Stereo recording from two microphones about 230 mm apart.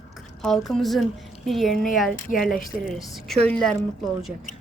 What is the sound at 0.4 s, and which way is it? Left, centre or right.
A woman's voice, centre.